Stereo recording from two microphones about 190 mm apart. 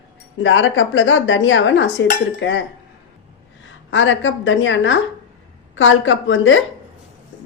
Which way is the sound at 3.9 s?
80° left.